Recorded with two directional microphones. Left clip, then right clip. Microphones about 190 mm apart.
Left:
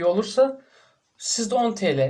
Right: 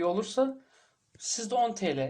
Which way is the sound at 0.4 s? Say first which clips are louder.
Left 9 dB; 40° right (ahead or behind).